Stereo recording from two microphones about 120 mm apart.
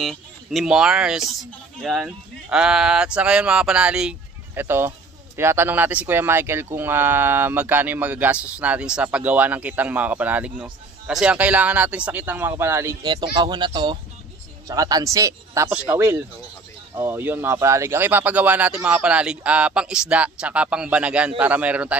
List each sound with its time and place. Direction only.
0.0 s speech: centre (ahead or behind)
4.6 s speech: 20° right (ahead or behind)
13.0 s speech: 35° right (ahead or behind)
14.7 s speech: 30° right (ahead or behind)
15.7 s speech: 10° right (ahead or behind)
16.9 s speech: 20° right (ahead or behind)